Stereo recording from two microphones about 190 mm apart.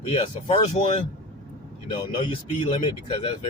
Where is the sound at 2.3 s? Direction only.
25° left (ahead or behind).